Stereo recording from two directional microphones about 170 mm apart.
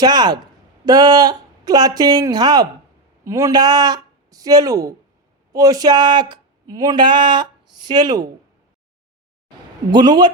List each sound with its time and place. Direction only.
0.0 s speech: 25° right (ahead or behind)
9.9 s speech: 25° right (ahead or behind)